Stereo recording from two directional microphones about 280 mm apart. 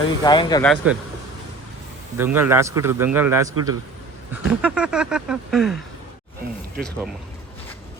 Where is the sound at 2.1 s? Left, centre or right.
Centre.